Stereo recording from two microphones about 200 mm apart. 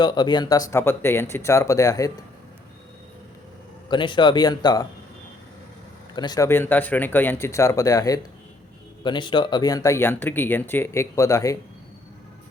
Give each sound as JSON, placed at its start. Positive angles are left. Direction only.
{"t": 0.0, "sound": "speech", "side_deg": 20}
{"t": 3.8, "sound": "speech", "side_deg": 25}
{"t": 6.1, "sound": "speech", "side_deg": 20}